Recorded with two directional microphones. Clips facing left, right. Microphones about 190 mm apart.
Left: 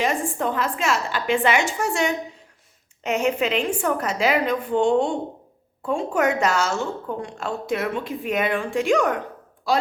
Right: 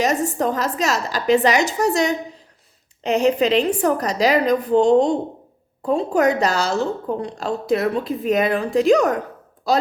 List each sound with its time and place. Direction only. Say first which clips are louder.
0.0 s a woman's voice: right 4 dB; 40° right (ahead or behind)